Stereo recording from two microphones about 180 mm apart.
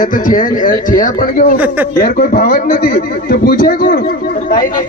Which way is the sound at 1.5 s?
10° right (ahead or behind).